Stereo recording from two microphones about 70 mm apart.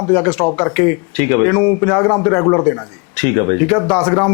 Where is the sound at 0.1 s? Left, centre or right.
Left.